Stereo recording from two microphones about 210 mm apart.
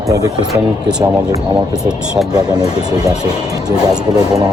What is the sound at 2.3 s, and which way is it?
Speech, 15° right (ahead or behind).